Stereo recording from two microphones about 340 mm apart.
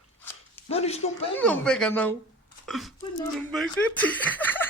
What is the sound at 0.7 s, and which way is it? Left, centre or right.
Speech, centre.